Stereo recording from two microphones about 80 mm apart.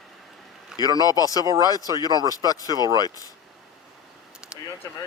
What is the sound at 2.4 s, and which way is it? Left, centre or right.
Speech, left.